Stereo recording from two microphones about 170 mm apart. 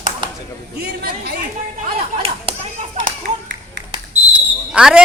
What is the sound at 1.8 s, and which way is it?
Whip, 35° right (ahead or behind).